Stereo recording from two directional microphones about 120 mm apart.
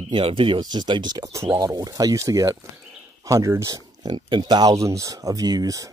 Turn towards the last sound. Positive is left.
turn(degrees=-30)  # may be behind; listen again after turning